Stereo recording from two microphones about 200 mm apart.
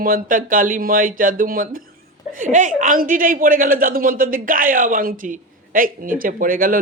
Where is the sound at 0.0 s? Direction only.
45° right (ahead or behind).